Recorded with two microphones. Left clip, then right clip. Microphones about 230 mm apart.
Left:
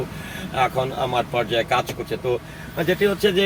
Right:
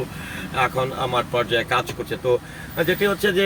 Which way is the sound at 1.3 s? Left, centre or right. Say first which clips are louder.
Even; centre.